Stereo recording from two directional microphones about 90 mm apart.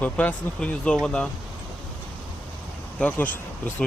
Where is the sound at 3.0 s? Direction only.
20° left (ahead or behind).